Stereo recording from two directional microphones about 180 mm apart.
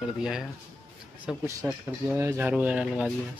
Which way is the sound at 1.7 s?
10° right (ahead or behind).